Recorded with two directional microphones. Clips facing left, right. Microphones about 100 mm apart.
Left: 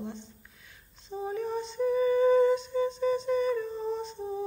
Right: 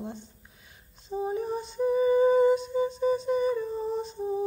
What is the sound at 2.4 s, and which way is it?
Humming, 10° right (ahead or behind).